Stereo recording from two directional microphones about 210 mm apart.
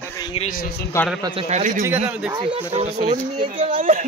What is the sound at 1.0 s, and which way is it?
Speech, 15° left (ahead or behind).